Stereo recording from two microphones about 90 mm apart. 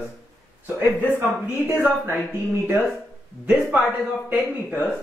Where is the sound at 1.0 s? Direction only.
20° right (ahead or behind).